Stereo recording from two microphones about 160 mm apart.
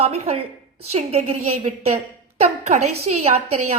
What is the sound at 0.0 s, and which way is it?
A woman's voice, 40° right (ahead or behind).